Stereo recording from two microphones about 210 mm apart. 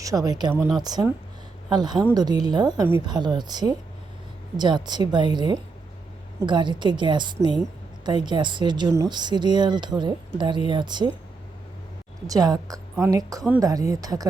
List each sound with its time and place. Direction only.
0.0 s a woman's voice: 15° right (ahead or behind)
12.3 s a woman's voice: 20° right (ahead or behind)